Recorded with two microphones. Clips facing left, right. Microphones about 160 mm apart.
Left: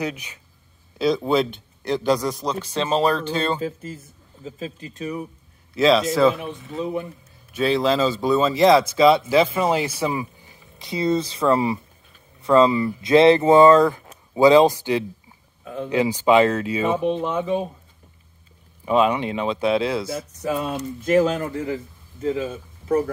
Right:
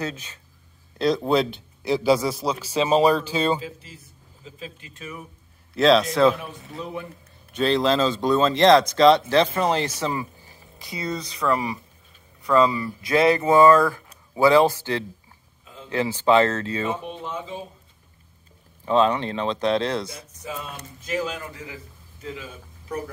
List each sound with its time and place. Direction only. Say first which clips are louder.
0.0 s speech: left 3 dB; 15° left (ahead or behind)
0.9 s speech: left 1 dB; centre (ahead or behind)
3.6 s speech: left 9 dB; 50° left (ahead or behind)
5.8 s speech: even; centre (ahead or behind)
6.4 s speech: left 7 dB; 25° left (ahead or behind)
7.5 s speech: left 1 dB; 5° left (ahead or behind)
10.8 s speech: left 8 dB; 25° left (ahead or behind)
15.6 s a sound: left 14 dB; 65° left (ahead or behind)
15.9 s speech: left 2 dB; 15° left (ahead or behind)
16.9 s speech: left 9 dB; 65° left (ahead or behind)
18.9 s speech: left 1 dB; 10° left (ahead or behind)
20.1 s speech: left 10 dB; 60° left (ahead or behind); by 22.9 s 40° left (ahead or behind)